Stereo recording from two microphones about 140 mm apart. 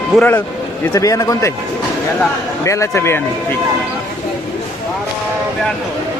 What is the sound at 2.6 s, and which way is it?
Speech, 20° left (ahead or behind).